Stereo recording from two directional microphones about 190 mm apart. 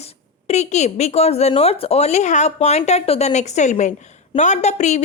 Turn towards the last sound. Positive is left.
turn(degrees=40)  # may be behind; listen again after turning